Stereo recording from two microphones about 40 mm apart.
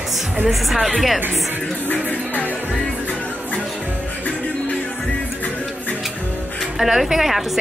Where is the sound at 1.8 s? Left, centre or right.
Left.